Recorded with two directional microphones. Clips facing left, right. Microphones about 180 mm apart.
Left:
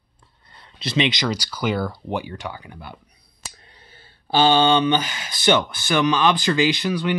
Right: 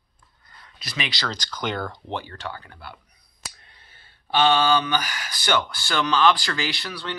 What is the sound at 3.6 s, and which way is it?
Speech, 30° left (ahead or behind).